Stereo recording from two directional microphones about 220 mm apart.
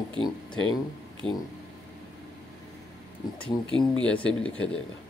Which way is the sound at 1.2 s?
5° left (ahead or behind).